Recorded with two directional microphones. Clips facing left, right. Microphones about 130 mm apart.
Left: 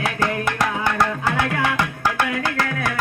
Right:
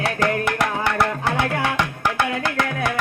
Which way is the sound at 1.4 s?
30° right (ahead or behind).